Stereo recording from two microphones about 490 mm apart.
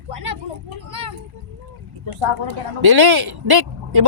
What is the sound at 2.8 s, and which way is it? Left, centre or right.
Speech, right.